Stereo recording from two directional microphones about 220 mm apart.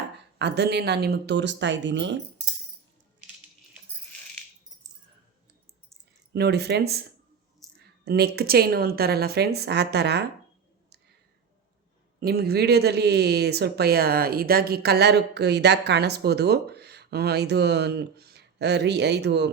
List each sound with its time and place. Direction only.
0.3 s speech: 50° right (ahead or behind)
6.3 s speech: 50° right (ahead or behind)
7.6 s a sound: centre (ahead or behind)
8.0 s speech: 45° right (ahead or behind)
12.2 s speech: 45° right (ahead or behind)